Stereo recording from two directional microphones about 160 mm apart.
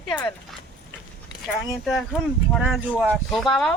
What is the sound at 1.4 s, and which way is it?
Speech, centre (ahead or behind).